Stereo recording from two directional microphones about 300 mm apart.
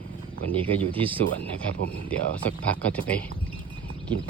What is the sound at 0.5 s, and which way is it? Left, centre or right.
Speech, centre.